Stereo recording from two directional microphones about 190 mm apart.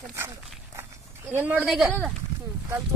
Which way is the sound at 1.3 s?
5° right (ahead or behind).